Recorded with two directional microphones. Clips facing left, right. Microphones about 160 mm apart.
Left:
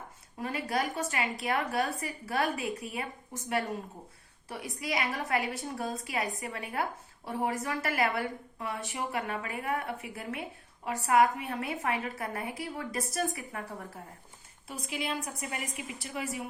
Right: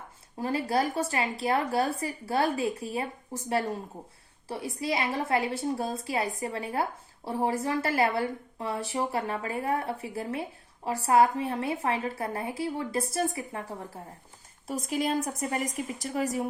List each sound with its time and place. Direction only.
0.3 s a woman's voice: 30° right (ahead or behind)
14.7 s a woman's voice: 40° right (ahead or behind)